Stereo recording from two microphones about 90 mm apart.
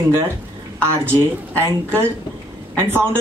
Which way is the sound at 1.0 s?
30° right (ahead or behind).